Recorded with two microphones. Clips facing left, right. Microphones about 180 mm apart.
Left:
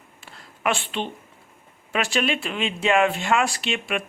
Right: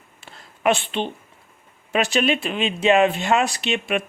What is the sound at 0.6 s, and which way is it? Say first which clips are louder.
Speech: right 5 dB; 20° right (ahead or behind).